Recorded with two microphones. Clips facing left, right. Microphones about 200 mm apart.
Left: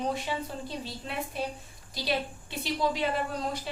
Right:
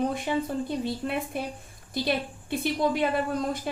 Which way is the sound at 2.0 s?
55° right (ahead or behind).